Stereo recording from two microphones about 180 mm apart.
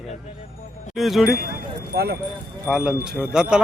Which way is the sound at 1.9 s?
60° right (ahead or behind).